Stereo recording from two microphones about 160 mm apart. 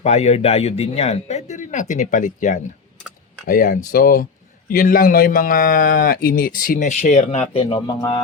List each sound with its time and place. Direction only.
0.0 s speech: 45° left (ahead or behind)